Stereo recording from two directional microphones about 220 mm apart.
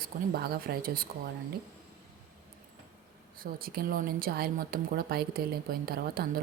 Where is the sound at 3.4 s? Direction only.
40° right (ahead or behind).